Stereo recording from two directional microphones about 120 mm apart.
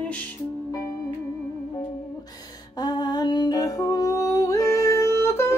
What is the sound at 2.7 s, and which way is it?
Music, 35° left (ahead or behind).